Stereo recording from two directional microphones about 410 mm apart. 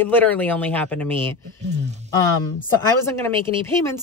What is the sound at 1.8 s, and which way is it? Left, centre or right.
Speech, centre.